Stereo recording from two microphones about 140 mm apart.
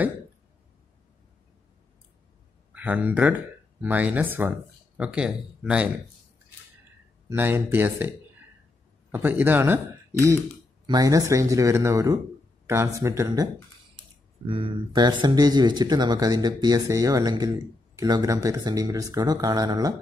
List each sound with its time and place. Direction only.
2.7 s speech: 10° right (ahead or behind)
7.2 s speech: 15° right (ahead or behind)
9.1 s speech: 15° right (ahead or behind)
10.9 s speech: 25° right (ahead or behind)
13.9 s speech: 40° right (ahead or behind)